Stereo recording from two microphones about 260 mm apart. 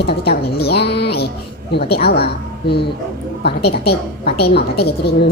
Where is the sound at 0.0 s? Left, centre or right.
Left.